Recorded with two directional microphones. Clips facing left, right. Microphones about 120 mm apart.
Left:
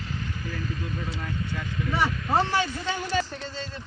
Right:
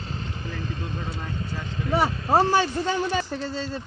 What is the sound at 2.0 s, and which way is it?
Speech, 35° right (ahead or behind).